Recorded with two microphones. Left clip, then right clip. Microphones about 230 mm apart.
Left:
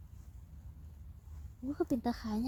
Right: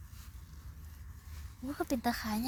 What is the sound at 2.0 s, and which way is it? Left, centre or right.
Speech, right.